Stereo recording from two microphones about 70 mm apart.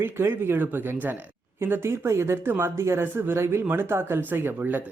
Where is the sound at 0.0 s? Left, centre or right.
Right.